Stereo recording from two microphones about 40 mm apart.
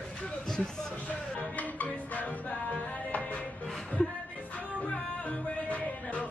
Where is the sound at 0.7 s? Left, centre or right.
Centre.